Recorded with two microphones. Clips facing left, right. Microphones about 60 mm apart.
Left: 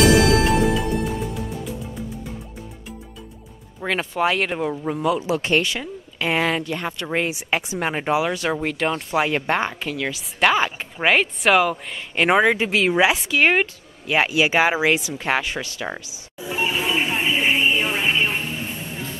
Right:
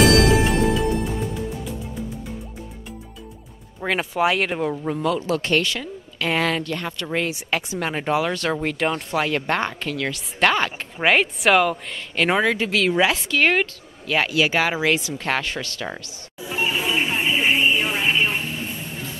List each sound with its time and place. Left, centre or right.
0.0 s music: centre
3.8 s speech: centre
9.1 s a woman's voice: centre
12.2 s speech: centre
16.3 s music: centre